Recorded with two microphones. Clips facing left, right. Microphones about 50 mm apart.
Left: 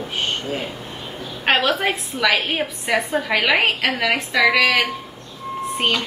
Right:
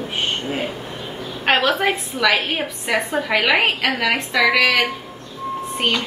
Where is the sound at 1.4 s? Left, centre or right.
Centre.